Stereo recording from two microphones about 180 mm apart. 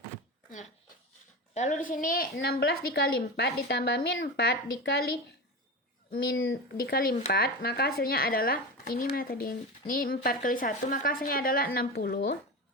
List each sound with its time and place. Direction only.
1.5 s speech: 40° left (ahead or behind); by 5.1 s 65° left (ahead or behind)
6.3 s speech: 90° left
6.7 s speech: 55° left (ahead or behind)